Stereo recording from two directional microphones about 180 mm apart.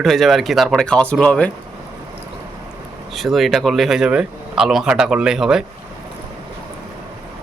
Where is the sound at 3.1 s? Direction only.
Centre (ahead or behind).